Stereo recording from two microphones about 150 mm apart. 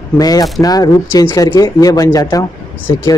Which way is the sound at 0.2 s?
25° left (ahead or behind).